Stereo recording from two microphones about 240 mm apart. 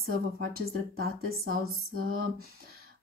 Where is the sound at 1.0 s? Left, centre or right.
Right.